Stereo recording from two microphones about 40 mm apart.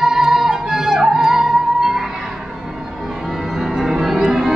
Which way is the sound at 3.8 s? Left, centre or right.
Centre.